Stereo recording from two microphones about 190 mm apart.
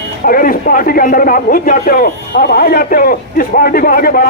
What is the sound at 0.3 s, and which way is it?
A man's voice, 50° left (ahead or behind).